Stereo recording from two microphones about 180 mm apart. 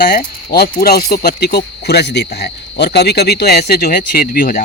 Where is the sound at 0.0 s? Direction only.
55° left (ahead or behind).